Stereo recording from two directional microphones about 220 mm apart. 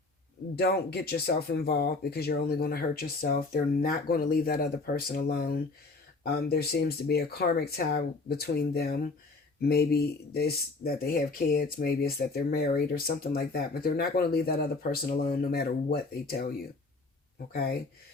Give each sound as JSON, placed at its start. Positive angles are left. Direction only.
{"t": 0.5, "sound": "speech", "side_deg": 45}